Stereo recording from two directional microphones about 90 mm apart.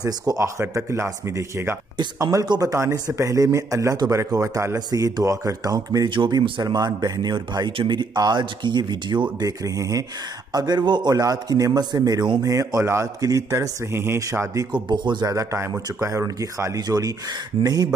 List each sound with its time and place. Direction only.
0.0 s a man's voice: 40° right (ahead or behind)
2.4 s a man's voice: 55° right (ahead or behind)
2.7 s a man's voice: 35° right (ahead or behind)
4.7 s a man's voice: 45° right (ahead or behind)
6.0 s speech: 65° right (ahead or behind)
6.6 s a man's voice: 50° right (ahead or behind)
9.8 s a man's voice: 40° right (ahead or behind)
14.7 s speech: 55° right (ahead or behind)
15.2 s a man's voice: 35° right (ahead or behind)